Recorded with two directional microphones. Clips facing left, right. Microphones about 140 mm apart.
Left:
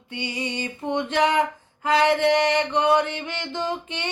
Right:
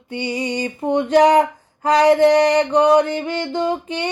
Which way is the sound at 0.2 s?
35° right (ahead or behind).